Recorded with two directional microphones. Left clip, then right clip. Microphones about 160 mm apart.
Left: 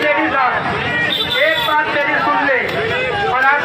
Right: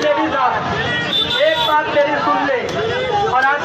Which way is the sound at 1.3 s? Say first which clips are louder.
Even; 20° right (ahead or behind).